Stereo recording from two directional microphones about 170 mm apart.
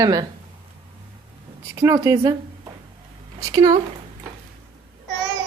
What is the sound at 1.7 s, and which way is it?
Speech, 20° right (ahead or behind).